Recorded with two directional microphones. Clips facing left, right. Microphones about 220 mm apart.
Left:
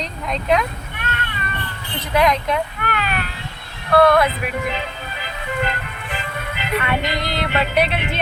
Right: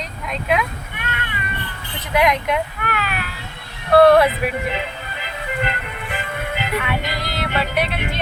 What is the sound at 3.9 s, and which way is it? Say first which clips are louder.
Speech: right 3 dB; 35° right (ahead or behind).